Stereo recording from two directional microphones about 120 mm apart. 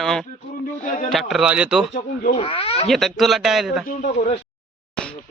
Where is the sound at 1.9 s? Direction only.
75° left (ahead or behind).